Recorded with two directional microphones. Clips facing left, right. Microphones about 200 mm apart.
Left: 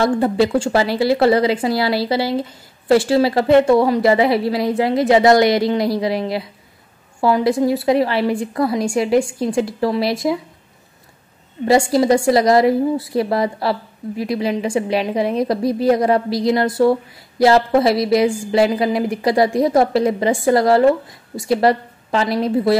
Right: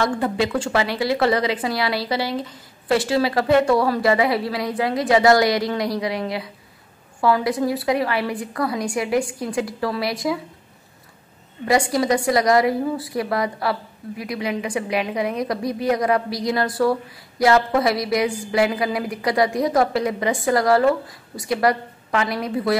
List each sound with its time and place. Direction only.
0.0 s a woman's voice: 30° left (ahead or behind)
11.6 s a woman's voice: 25° left (ahead or behind)